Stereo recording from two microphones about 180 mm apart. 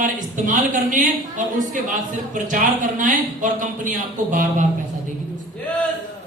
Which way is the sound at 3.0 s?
45° right (ahead or behind).